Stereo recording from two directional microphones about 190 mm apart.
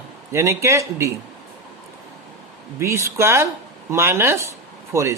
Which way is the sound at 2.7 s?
15° right (ahead or behind).